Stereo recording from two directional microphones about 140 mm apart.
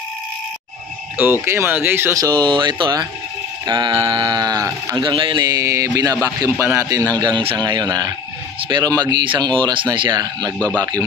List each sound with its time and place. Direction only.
1.2 s a man's voice: 15° right (ahead or behind)